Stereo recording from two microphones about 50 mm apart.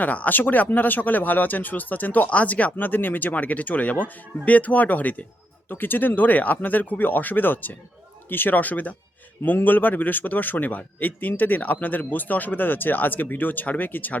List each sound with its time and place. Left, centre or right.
0.0 s a man's voice: left